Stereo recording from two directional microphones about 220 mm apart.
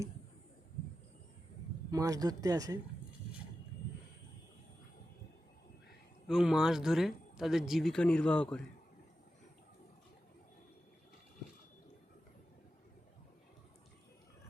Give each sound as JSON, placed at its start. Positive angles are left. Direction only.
{"t": 1.9, "sound": "speech", "side_deg": -15}
{"t": 6.2, "sound": "speech", "side_deg": 0}